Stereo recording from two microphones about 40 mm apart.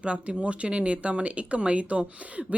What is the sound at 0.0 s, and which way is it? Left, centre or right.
Speech, right.